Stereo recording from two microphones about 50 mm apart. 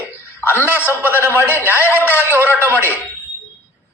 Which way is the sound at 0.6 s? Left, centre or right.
Right.